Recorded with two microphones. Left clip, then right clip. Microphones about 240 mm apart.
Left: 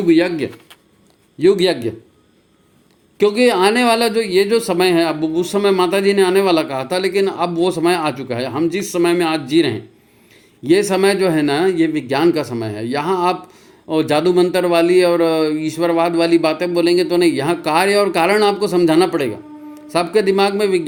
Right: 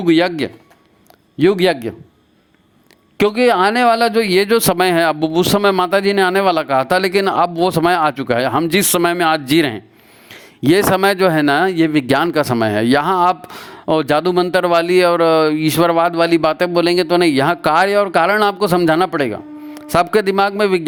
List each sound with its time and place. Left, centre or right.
0.0 s speech: right
3.2 s speech: right